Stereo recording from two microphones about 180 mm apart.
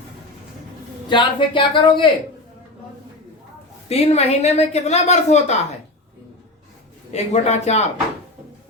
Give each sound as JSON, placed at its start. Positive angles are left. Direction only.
{"t": 1.1, "sound": "speech", "side_deg": 25}
{"t": 3.8, "sound": "a woman's voice", "side_deg": 35}
{"t": 7.1, "sound": "a woman's voice", "side_deg": 40}